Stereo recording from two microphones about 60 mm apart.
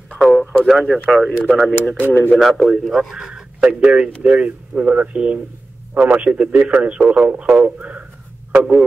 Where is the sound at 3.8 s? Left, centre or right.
Centre.